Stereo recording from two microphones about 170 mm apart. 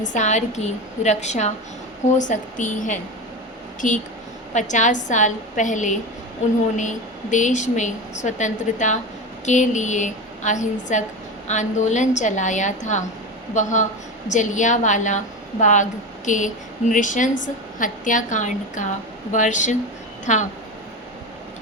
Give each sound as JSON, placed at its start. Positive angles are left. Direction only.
{"t": 0.1, "sound": "a woman's voice", "side_deg": 45}